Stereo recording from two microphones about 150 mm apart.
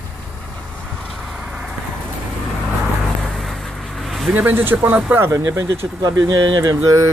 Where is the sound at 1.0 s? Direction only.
Centre (ahead or behind).